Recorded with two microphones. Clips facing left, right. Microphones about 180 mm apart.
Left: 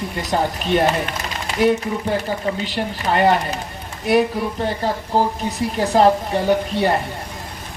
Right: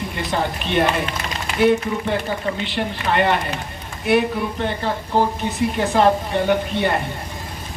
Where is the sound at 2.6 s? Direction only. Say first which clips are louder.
Even; 40° left (ahead or behind).